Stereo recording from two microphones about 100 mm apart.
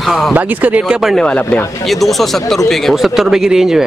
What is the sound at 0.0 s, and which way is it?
Speech, centre (ahead or behind).